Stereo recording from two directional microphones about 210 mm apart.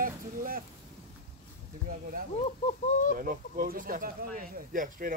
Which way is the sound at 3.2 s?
40° right (ahead or behind).